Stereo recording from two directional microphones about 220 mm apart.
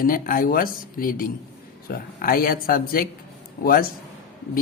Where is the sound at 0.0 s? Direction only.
40° left (ahead or behind).